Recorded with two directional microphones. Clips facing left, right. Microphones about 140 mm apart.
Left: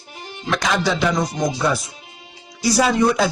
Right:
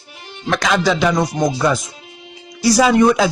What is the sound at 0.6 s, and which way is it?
Speech, 90° right.